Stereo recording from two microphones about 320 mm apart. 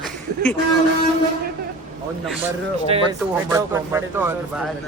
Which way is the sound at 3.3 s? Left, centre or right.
Centre.